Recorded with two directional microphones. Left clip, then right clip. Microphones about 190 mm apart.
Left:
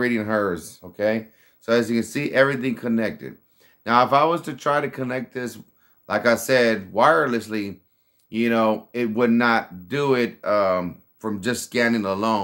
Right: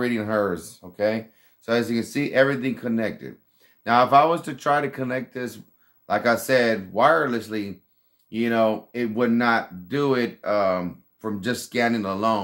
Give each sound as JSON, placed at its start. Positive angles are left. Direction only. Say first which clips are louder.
{"t": 0.0, "sound": "speech", "louder": "left 1 dB", "side_deg": 25}